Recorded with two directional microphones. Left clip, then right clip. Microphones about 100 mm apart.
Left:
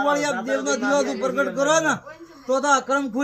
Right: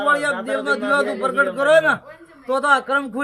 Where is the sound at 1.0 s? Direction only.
85° right.